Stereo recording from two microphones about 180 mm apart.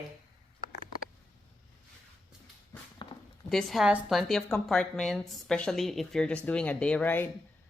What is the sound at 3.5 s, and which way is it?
Speech, centre (ahead or behind).